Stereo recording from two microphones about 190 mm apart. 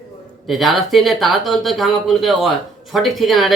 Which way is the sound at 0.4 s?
Centre (ahead or behind).